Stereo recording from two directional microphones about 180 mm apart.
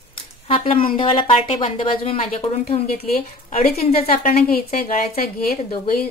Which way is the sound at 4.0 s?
35° left (ahead or behind).